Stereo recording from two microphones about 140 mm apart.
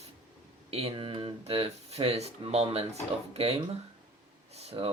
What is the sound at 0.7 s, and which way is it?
Speech, 45° right (ahead or behind).